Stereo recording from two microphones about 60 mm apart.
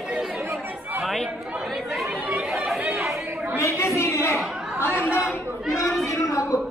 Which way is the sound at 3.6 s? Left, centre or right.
Left.